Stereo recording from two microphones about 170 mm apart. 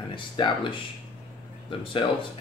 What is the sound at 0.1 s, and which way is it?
Speech, 30° left (ahead or behind).